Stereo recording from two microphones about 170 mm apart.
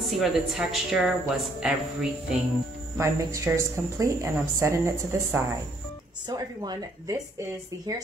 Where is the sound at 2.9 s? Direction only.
20° right (ahead or behind).